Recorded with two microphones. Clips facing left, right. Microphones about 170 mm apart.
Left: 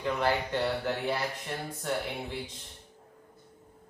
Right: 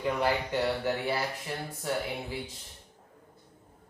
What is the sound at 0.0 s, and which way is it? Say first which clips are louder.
Speech: even; 10° right (ahead or behind).